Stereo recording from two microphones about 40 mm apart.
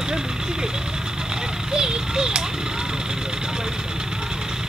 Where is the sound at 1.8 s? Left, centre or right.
Right.